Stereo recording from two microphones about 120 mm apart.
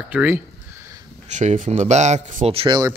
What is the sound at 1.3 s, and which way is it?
Speech, 85° right.